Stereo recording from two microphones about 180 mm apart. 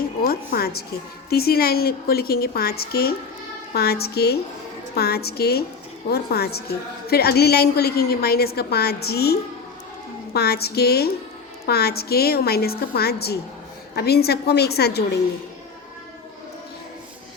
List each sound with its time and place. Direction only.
0.2 s a woman's voice: 55° left (ahead or behind)